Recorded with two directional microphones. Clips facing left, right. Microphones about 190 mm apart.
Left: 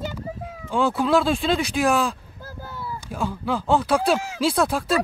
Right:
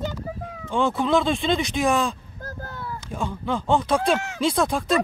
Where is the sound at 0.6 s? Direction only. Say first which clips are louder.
Left 1 dB; 5° left (ahead or behind).